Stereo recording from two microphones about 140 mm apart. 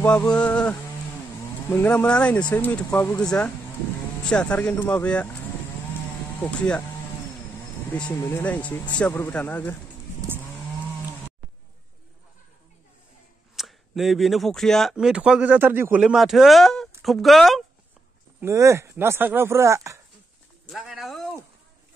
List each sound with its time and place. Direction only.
0.0 s speech: 5° left (ahead or behind)
6.4 s speech: 5° left (ahead or behind)
8.1 s speech: 20° left (ahead or behind)
13.6 s speech: centre (ahead or behind)
18.4 s speech: 20° right (ahead or behind)
20.7 s speech: centre (ahead or behind)